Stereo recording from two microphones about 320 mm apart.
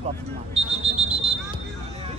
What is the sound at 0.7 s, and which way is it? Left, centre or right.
Smoke detector, centre.